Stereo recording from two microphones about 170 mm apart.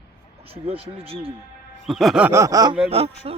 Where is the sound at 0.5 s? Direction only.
35° right (ahead or behind).